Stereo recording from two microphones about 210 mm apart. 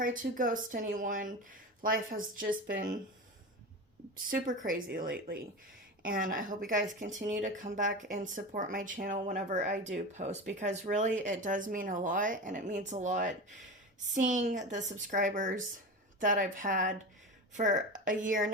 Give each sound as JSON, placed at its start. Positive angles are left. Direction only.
{"t": 0.0, "sound": "speech", "side_deg": -40}
{"t": 4.4, "sound": "speech", "side_deg": -40}